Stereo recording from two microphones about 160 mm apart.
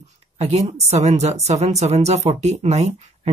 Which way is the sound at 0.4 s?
40° right (ahead or behind).